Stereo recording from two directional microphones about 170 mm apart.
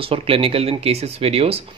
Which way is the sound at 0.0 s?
35° right (ahead or behind).